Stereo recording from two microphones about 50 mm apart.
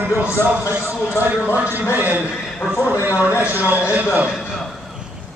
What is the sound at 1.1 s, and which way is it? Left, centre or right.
Speech, left.